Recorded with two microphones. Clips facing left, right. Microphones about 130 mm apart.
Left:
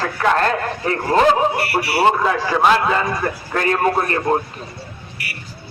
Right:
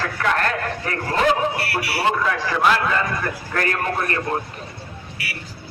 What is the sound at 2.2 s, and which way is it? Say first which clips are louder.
A man's voice: left 3 dB; 30° left (ahead or behind).